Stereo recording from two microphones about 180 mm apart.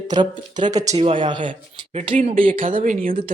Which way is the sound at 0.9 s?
30° right (ahead or behind).